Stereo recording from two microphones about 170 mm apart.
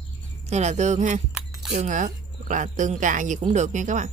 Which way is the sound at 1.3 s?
Centre (ahead or behind).